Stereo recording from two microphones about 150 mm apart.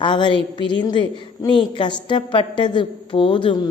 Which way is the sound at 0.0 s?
30° left (ahead or behind).